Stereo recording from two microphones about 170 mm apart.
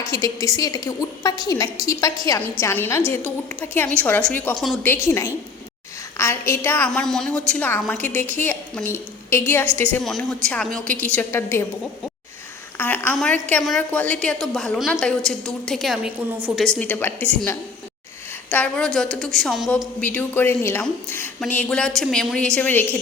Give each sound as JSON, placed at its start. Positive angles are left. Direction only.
{"t": 0.1, "sound": "a woman's voice", "side_deg": 20}
{"t": 4.8, "sound": "a woman's voice", "side_deg": 15}
{"t": 10.0, "sound": "a woman's voice", "side_deg": 0}
{"t": 12.7, "sound": "a sound", "side_deg": 10}
{"t": 13.1, "sound": "a woman's voice", "side_deg": 5}
{"t": 16.8, "sound": "a woman's voice", "side_deg": 10}
{"t": 20.0, "sound": "a woman's voice", "side_deg": 10}